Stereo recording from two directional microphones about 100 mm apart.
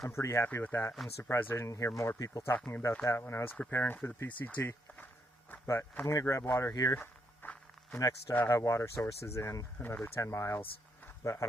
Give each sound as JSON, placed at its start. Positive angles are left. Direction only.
{"t": 0.1, "sound": "speech", "side_deg": 30}
{"t": 2.6, "sound": "speech", "side_deg": 15}
{"t": 2.9, "sound": "speech", "side_deg": 25}
{"t": 6.1, "sound": "speech", "side_deg": 30}
{"t": 6.9, "sound": "walk", "side_deg": 20}
{"t": 7.9, "sound": "speech", "side_deg": 35}
{"t": 9.7, "sound": "speech", "side_deg": 20}
{"t": 10.0, "sound": "speech", "side_deg": 30}
{"t": 11.0, "sound": "a sound", "side_deg": 30}